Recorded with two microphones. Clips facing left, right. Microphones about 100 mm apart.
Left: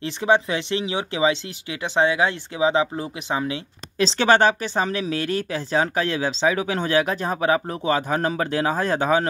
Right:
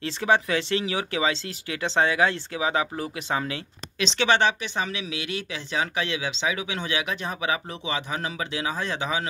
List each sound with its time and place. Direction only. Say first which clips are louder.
0.0 s speech: left 3 dB; 20° left (ahead or behind)
4.0 s speech: left 5 dB; 40° left (ahead or behind)